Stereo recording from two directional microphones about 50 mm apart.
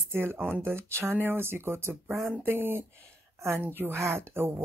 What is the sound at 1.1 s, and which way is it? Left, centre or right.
Speech, right.